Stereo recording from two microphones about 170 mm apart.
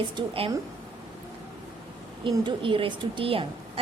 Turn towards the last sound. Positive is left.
turn(degrees=-30)  # may be behind; listen again after turning